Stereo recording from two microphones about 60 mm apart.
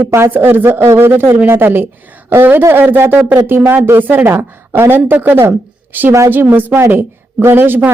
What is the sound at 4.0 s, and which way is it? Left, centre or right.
A woman's voice, right.